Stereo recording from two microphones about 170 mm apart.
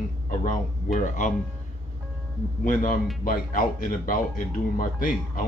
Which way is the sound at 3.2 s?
55° left (ahead or behind).